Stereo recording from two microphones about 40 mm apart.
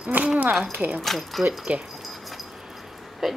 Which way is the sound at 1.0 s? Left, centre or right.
Centre.